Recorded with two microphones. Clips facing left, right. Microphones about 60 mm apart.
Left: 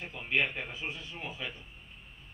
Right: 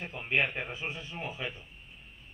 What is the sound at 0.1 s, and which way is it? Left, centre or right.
A man's voice, right.